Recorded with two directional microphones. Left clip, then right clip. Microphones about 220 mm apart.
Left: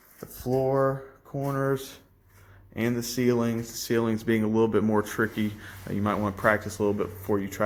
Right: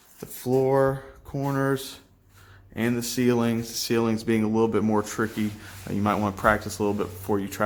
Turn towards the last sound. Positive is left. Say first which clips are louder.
# right 1 dB
turn(degrees=-5)  # may be behind; listen again after turning